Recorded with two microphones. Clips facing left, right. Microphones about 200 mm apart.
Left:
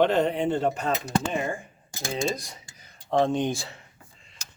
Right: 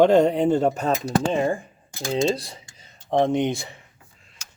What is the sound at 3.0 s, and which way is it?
Speech, 20° right (ahead or behind).